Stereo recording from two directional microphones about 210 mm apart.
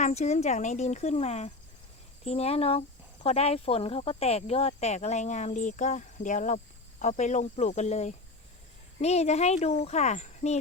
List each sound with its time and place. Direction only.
0.0 s speech: 35° left (ahead or behind)